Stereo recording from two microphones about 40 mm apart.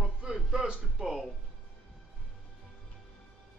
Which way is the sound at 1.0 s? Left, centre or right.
Centre.